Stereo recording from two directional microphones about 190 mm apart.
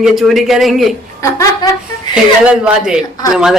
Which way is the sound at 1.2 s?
15° left (ahead or behind).